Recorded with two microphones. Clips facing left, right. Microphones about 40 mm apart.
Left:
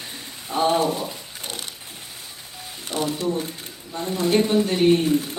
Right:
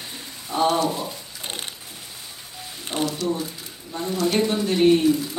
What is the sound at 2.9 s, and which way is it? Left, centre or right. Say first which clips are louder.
Music: right 1 dB; right.